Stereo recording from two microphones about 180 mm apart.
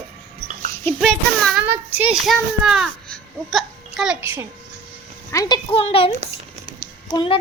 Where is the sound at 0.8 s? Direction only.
5° left (ahead or behind).